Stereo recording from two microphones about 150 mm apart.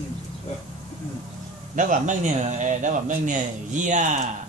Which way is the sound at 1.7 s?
60° right (ahead or behind).